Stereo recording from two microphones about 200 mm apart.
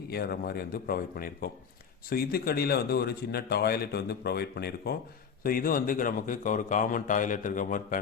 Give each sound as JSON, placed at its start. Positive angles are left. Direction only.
{"t": 0.1, "sound": "a man's voice", "side_deg": 50}